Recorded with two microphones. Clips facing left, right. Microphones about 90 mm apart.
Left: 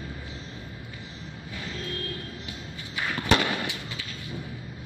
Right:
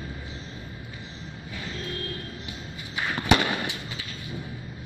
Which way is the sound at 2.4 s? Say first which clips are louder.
Right 1 dB; 20° right (ahead or behind).